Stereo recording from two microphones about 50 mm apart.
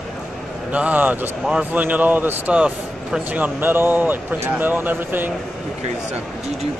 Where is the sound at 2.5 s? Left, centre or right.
Right.